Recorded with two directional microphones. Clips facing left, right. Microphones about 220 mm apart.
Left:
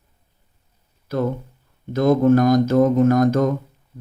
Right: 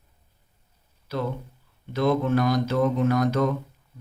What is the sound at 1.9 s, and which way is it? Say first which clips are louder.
Mantra: left 7 dB; 45° left (ahead or behind).